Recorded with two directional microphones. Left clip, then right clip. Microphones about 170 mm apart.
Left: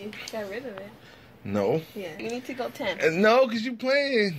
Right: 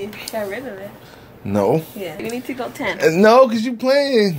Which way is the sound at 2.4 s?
40° left (ahead or behind).